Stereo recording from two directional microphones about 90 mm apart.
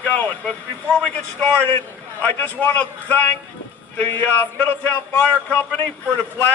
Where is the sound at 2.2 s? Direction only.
15° left (ahead or behind).